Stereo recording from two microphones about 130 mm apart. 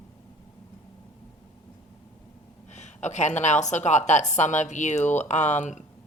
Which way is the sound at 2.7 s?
65° left (ahead or behind).